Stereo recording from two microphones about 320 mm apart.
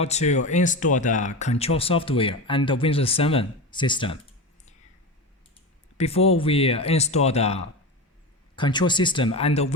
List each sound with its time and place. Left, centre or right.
0.0 s speech: left
6.0 s speech: centre